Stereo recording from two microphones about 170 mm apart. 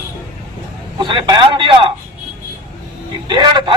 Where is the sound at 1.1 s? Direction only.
30° right (ahead or behind).